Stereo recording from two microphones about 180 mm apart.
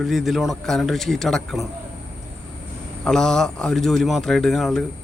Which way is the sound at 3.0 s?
5° left (ahead or behind).